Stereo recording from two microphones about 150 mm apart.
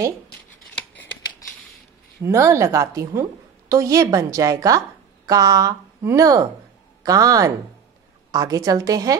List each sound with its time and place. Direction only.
2.2 s a woman's voice: 20° right (ahead or behind)